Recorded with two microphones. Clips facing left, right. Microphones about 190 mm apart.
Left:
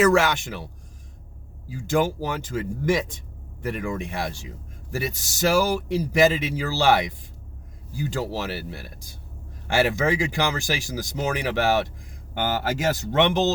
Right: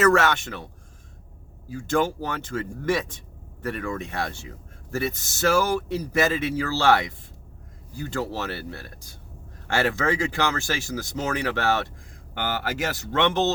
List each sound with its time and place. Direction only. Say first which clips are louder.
0.0 s a man's voice: left 1 dB; 10° left (ahead or behind)
1.7 s a man's voice: left 1 dB; 10° left (ahead or behind)
12.9 s a man's voice: left 3 dB; 15° left (ahead or behind)